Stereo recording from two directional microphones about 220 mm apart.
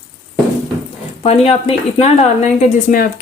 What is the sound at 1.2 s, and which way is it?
A woman's voice, 30° left (ahead or behind).